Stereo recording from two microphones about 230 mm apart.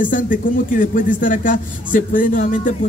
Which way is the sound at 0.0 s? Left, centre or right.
Left.